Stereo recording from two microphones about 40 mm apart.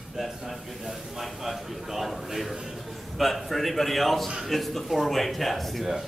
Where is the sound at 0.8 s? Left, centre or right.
Centre.